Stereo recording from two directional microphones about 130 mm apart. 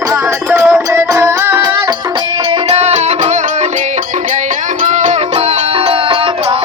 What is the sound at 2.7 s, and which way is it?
Music, 55° right (ahead or behind).